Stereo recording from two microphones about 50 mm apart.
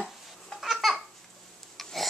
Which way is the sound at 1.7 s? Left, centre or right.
Centre.